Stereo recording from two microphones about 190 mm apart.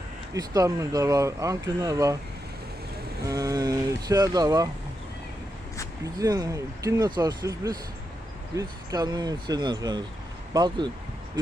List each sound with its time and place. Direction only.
0.3 s speech: 20° right (ahead or behind)
3.2 s speech: 20° right (ahead or behind)
6.1 s speech: 20° right (ahead or behind)